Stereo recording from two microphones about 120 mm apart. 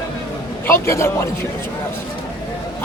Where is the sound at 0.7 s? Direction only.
25° left (ahead or behind).